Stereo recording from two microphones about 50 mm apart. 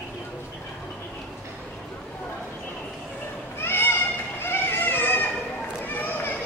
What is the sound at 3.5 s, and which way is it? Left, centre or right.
Children playing, left.